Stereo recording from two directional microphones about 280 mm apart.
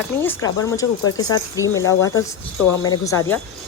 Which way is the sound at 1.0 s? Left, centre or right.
Left.